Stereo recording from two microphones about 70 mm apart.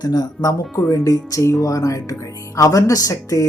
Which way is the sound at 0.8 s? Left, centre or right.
Left.